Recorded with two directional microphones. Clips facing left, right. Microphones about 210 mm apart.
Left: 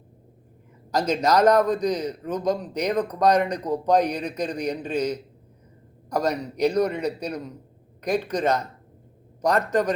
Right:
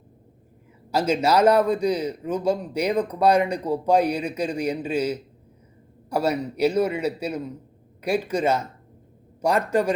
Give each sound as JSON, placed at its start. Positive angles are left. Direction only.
{"t": 0.9, "sound": "a man's voice", "side_deg": -10}